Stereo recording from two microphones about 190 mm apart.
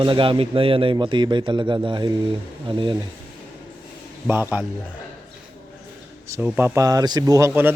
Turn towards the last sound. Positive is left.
turn(degrees=-10)  # may be behind; listen again after turning